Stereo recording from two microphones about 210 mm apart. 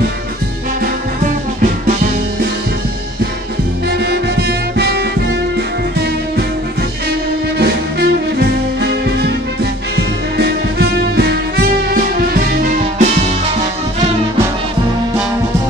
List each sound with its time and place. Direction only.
4.0 s music: 50° right (ahead or behind)
7.5 s music: 50° right (ahead or behind); by 13.3 s 35° right (ahead or behind)